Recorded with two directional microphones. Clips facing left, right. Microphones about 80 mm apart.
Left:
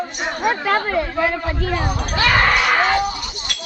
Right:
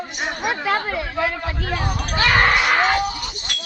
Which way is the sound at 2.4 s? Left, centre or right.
Centre.